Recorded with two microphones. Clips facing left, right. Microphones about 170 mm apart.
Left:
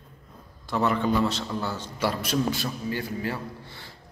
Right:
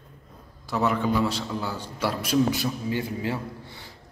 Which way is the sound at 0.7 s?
5° right (ahead or behind).